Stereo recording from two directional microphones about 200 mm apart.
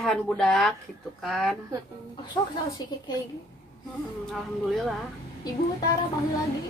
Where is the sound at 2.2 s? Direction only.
20° left (ahead or behind).